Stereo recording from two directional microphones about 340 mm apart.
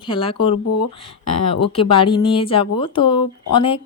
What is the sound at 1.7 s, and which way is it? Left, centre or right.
Speech, centre.